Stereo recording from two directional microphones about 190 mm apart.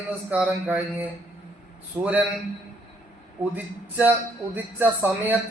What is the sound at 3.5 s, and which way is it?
Speech, 10° right (ahead or behind).